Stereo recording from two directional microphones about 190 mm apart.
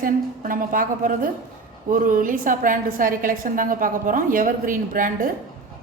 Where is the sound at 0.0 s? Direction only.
45° right (ahead or behind).